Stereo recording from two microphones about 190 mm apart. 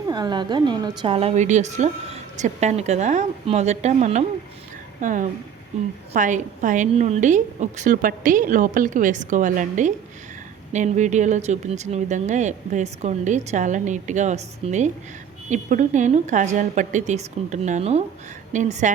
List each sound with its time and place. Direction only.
0.1 s a woman's voice: 20° right (ahead or behind); by 18.9 s 40° right (ahead or behind)